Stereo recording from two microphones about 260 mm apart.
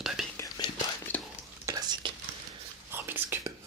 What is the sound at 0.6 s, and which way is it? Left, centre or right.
Whispering, centre.